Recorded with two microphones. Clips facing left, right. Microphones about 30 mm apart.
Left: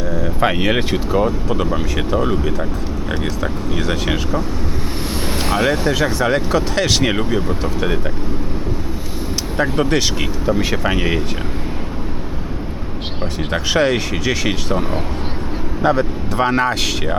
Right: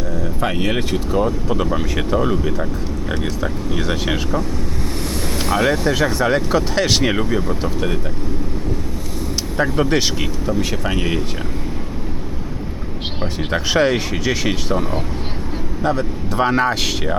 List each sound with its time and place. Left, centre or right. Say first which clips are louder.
0.3 s speech: left 4 dB; left
5.5 s speech: even; centre
7.0 s speech: left 1 dB; centre
9.7 s speech: even; centre
10.2 s speech: left 2 dB; centre
13.5 s speech: even; centre
16.3 s speech: even; centre